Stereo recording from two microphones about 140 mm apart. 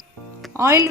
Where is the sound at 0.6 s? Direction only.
20° right (ahead or behind).